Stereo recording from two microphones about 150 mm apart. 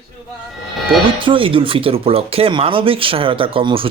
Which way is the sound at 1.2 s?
35° right (ahead or behind).